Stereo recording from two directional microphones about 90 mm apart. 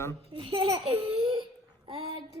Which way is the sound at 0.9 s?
90° right.